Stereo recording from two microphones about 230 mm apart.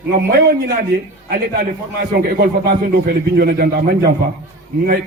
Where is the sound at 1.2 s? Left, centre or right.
Right.